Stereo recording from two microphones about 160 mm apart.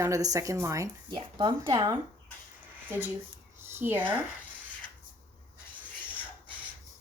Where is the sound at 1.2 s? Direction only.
30° right (ahead or behind).